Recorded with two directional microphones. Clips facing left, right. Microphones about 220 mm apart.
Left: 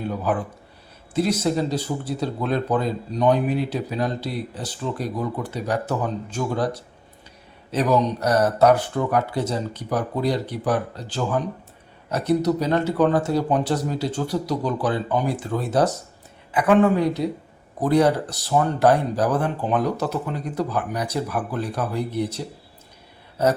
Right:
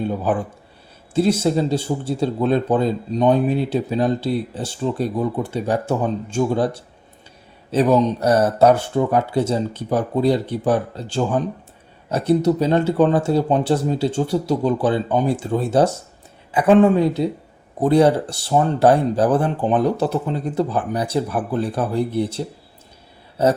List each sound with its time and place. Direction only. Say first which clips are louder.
0.1 s speech: right 3 dB; 30° right (ahead or behind)